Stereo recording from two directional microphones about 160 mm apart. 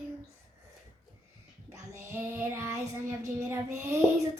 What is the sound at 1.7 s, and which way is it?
Child singing, 15° right (ahead or behind).